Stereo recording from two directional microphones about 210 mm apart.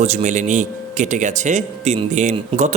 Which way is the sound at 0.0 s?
30° right (ahead or behind).